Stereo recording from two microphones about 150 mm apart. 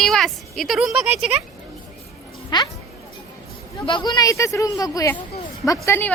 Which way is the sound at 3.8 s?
30° left (ahead or behind).